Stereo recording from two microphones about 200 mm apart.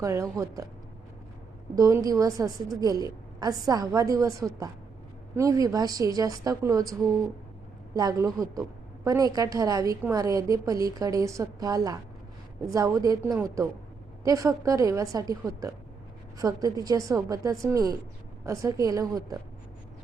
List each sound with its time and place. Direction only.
0.0 s a woman's voice: 15° right (ahead or behind)
1.7 s a woman's voice: 15° right (ahead or behind)
7.9 s a woman's voice: 15° right (ahead or behind)